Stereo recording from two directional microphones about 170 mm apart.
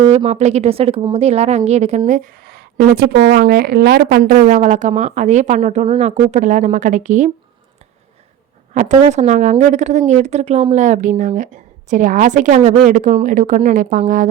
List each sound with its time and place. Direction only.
0.1 s speech: 40° right (ahead or behind); by 4.2 s 70° right (ahead or behind)
4.2 s speech: 50° right (ahead or behind)
8.7 s speech: 45° right (ahead or behind)